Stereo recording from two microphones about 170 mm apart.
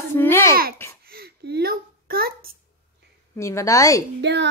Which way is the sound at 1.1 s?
65° right (ahead or behind).